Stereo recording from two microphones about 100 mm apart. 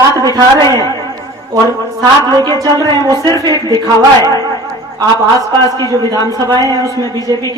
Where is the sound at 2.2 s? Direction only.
40° right (ahead or behind).